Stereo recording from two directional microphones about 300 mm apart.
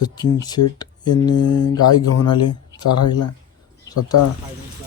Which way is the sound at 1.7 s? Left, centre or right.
Left.